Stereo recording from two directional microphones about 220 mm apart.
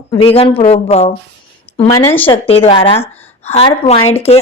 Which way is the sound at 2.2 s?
25° left (ahead or behind).